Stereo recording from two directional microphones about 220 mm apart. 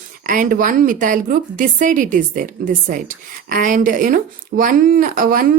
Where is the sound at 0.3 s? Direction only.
40° right (ahead or behind).